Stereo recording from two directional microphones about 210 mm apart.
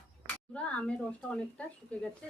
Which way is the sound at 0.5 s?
5° left (ahead or behind).